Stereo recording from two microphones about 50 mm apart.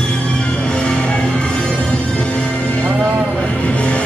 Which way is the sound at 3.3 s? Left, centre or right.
Left.